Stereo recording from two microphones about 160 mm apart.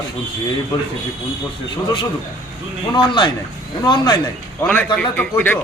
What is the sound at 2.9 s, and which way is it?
A man's voice, 30° left (ahead or behind).